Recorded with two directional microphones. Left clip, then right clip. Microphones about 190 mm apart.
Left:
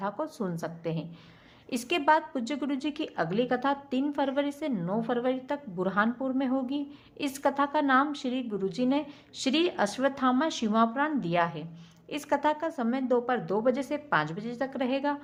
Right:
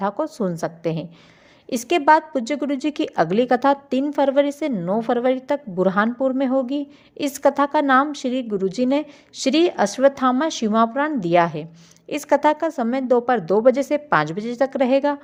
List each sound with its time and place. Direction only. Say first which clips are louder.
0.0 s a woman's voice: right 10 dB; 35° right (ahead or behind)